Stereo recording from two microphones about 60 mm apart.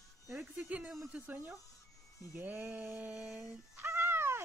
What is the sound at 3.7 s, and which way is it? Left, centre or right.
Cat, right.